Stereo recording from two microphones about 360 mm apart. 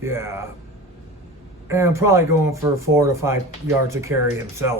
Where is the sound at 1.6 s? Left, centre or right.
Centre.